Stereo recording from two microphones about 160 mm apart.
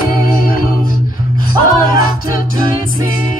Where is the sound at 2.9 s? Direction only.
60° left (ahead or behind).